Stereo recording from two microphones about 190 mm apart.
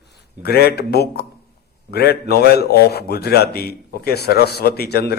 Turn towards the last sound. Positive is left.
turn(degrees=55)  # may be behind; listen again after turning